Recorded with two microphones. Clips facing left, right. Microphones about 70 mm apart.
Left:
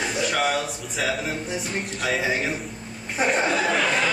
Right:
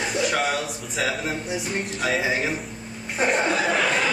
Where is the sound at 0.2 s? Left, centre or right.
Centre.